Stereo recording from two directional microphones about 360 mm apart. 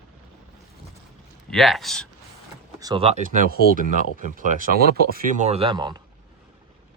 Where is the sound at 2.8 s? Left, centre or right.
Centre.